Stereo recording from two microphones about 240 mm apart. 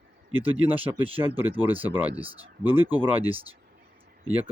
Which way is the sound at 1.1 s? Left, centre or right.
Right.